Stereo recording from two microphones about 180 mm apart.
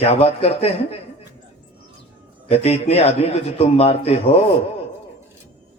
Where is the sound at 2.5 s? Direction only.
35° left (ahead or behind).